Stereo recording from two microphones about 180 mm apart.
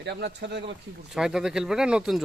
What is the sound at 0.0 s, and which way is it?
Speech, 70° right (ahead or behind).